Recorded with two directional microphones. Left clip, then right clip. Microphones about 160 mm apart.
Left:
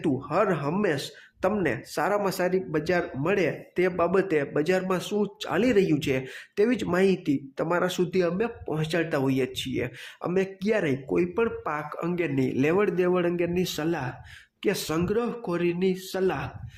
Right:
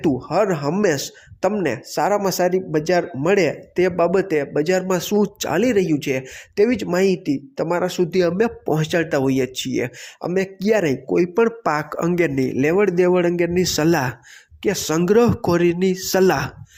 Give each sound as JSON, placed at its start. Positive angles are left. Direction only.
{"t": 0.0, "sound": "speech", "side_deg": -25}
{"t": 5.5, "sound": "speech", "side_deg": -25}
{"t": 11.3, "sound": "speech", "side_deg": -40}
{"t": 12.4, "sound": "speech", "side_deg": -20}
{"t": 13.8, "sound": "speech", "side_deg": -50}
{"t": 14.6, "sound": "speech", "side_deg": -30}
{"t": 15.0, "sound": "speech", "side_deg": -50}
{"t": 16.1, "sound": "speech", "side_deg": -50}